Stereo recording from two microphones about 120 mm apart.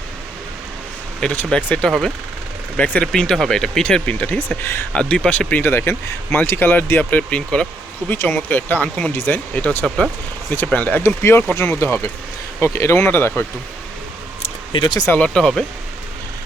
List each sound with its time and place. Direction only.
1.2 s speech: 10° left (ahead or behind)
4.9 s speech: 5° left (ahead or behind)
14.7 s speech: 35° left (ahead or behind)
15.1 s speech: 10° left (ahead or behind)